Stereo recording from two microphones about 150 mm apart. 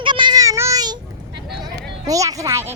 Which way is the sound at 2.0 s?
25° right (ahead or behind).